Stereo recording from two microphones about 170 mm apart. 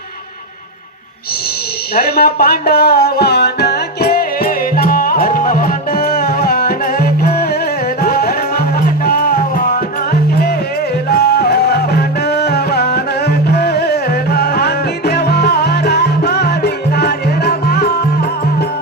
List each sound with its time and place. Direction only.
2.0 s music: 65° left (ahead or behind)